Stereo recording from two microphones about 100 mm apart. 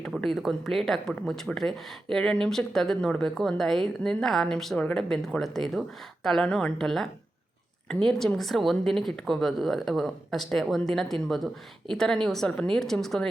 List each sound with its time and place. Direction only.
0.2 s speech: centre (ahead or behind)